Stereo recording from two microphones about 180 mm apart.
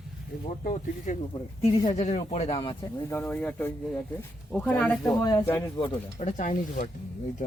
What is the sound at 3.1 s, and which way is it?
Speech, 10° left (ahead or behind).